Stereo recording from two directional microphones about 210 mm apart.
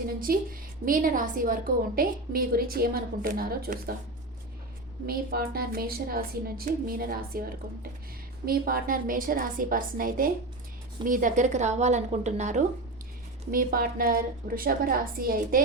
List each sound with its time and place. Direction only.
0.3 s a woman's voice: 45° right (ahead or behind)
5.0 s a woman's voice: 45° right (ahead or behind)
8.4 s a woman's voice: 45° right (ahead or behind)